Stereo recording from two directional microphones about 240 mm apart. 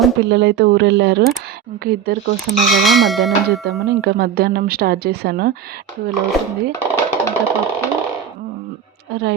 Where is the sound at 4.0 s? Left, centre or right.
Right.